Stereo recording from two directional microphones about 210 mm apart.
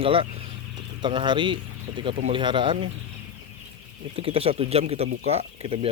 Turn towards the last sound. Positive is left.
turn(degrees=-25)  # may be behind; listen again after turning